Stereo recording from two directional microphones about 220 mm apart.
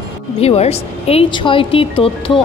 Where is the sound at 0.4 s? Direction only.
30° left (ahead or behind).